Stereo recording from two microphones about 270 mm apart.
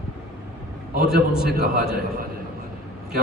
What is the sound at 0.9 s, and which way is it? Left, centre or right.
Speech, right.